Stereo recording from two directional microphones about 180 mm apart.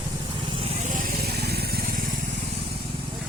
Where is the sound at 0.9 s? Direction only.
60° right (ahead or behind).